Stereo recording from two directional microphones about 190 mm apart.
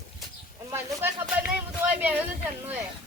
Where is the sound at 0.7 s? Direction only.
15° right (ahead or behind).